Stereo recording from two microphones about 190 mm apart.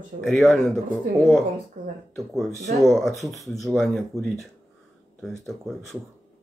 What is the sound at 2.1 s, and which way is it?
Speech, centre (ahead or behind).